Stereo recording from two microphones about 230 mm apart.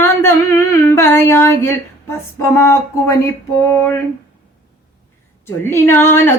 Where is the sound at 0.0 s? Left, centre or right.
Centre.